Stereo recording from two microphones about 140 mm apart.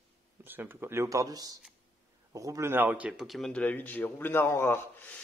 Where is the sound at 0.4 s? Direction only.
15° right (ahead or behind).